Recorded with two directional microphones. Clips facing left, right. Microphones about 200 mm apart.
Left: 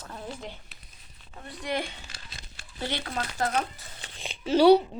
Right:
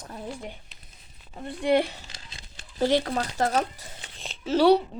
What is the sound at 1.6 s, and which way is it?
Speech, 30° right (ahead or behind).